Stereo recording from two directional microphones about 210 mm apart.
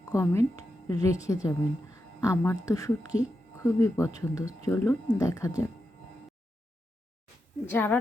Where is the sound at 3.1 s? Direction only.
35° left (ahead or behind).